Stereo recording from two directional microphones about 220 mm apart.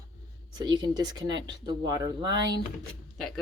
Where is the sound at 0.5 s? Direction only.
20° right (ahead or behind).